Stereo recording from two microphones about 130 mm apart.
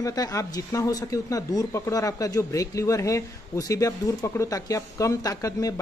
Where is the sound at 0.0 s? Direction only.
25° left (ahead or behind).